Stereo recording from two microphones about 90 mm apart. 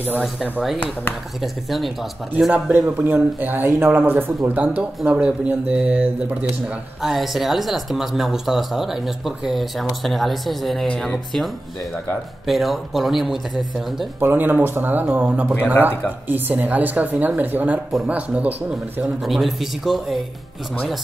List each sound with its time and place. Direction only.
1.4 s speech: centre (ahead or behind)
2.5 s speech: 20° right (ahead or behind)
7.0 s speech: centre (ahead or behind)
14.2 s speech: 20° right (ahead or behind)
19.2 s speech: centre (ahead or behind)